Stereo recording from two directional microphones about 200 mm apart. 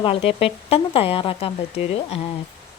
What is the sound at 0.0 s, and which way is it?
Speech, 30° left (ahead or behind).